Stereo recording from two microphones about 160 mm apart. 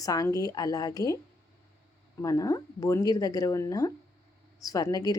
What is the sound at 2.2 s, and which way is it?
Speech, 20° left (ahead or behind).